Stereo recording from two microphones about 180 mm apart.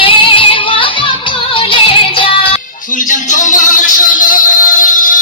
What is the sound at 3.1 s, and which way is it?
Music, 45° left (ahead or behind).